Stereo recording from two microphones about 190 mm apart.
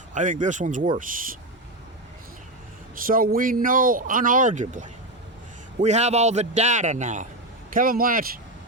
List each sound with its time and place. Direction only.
0.1 s a man's voice: 40° right (ahead or behind)
2.9 s a man's voice: 50° right (ahead or behind)